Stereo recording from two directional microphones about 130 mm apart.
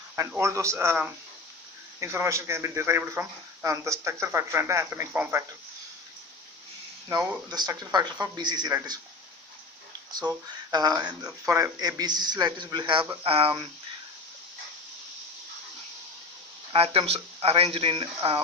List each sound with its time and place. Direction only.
0.3 s speech: 20° right (ahead or behind)
7.5 s speech: 30° right (ahead or behind)
10.7 s speech: 30° right (ahead or behind); by 13.7 s 45° right (ahead or behind)
16.7 s speech: 45° right (ahead or behind)